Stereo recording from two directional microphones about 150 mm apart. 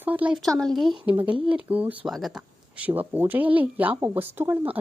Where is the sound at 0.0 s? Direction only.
10° right (ahead or behind).